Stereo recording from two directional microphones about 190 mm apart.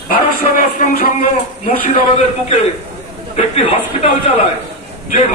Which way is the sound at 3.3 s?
35° left (ahead or behind).